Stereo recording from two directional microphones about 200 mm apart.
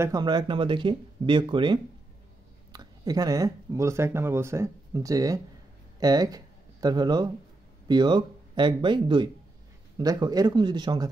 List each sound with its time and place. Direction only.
0.0 s speech: 20° right (ahead or behind)